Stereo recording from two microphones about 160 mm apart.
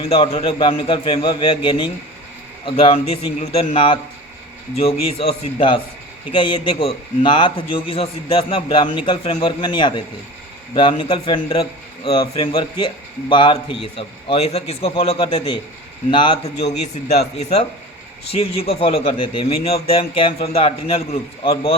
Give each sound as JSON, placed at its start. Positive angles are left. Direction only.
{"t": 0.0, "sound": "a man's voice", "side_deg": 35}